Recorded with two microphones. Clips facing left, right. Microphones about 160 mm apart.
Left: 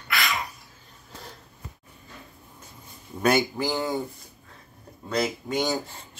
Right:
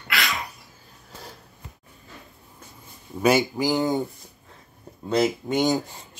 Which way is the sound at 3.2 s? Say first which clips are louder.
Right 2 dB; 10° right (ahead or behind).